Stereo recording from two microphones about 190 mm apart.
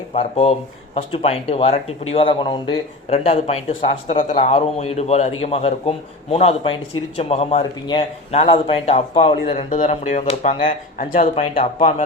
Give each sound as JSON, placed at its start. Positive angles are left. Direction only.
{"t": 0.1, "sound": "a man's voice", "side_deg": 35}
{"t": 10.7, "sound": "speech", "side_deg": 45}
{"t": 11.5, "sound": "a man's voice", "side_deg": 35}